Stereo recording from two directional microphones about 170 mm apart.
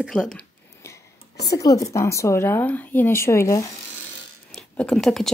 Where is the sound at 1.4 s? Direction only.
20° left (ahead or behind).